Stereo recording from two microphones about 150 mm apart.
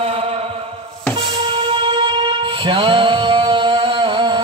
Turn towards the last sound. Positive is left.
turn(degrees=-30)  # may be behind; listen again after turning